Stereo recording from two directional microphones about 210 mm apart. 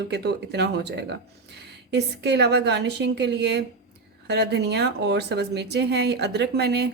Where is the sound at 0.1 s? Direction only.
50° right (ahead or behind).